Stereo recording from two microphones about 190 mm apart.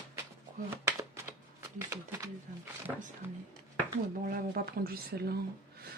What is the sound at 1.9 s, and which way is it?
Speech, 15° right (ahead or behind).